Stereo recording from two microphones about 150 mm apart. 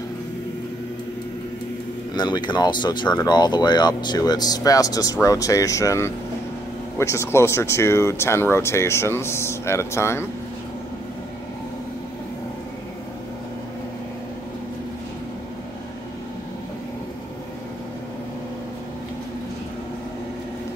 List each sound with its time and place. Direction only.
2.1 s speech: 30° left (ahead or behind)